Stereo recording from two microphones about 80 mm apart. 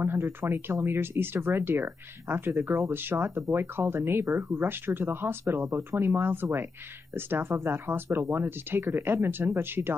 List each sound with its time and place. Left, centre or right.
0.0 s speech: right